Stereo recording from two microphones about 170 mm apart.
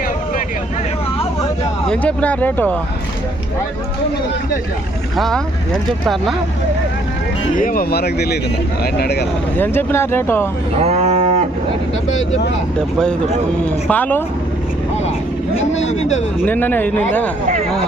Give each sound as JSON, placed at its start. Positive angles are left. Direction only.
{"t": 1.9, "sound": "speech", "side_deg": 5}
{"t": 5.1, "sound": "speech", "side_deg": 0}
{"t": 7.5, "sound": "speech", "side_deg": 55}
{"t": 9.6, "sound": "speech", "side_deg": 15}
{"t": 10.8, "sound": "cattle", "side_deg": -40}
{"t": 12.0, "sound": "speech", "side_deg": 45}
{"t": 13.8, "sound": "speech", "side_deg": 10}
{"t": 15.5, "sound": "speech", "side_deg": 40}
{"t": 16.5, "sound": "speech", "side_deg": 10}